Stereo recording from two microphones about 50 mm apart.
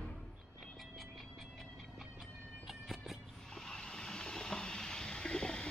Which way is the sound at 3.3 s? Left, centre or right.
Centre.